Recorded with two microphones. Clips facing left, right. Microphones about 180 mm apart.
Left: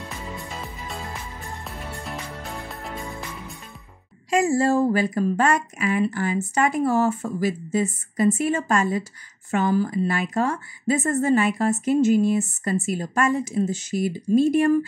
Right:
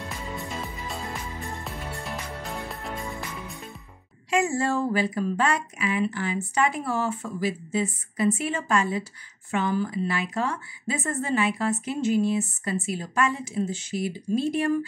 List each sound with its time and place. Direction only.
0.4 s music: centre (ahead or behind)
4.3 s a woman's voice: 35° left (ahead or behind)